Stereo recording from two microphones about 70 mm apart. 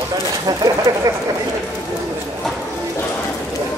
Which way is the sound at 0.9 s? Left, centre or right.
Right.